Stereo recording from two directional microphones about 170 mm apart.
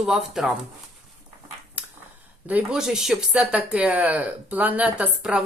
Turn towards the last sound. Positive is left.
turn(degrees=-5)  # may be behind; listen again after turning